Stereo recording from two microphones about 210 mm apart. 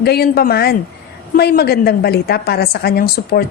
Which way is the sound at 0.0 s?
50° left (ahead or behind).